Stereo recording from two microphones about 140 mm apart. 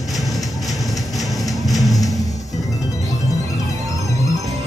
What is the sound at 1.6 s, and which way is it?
Music, centre (ahead or behind).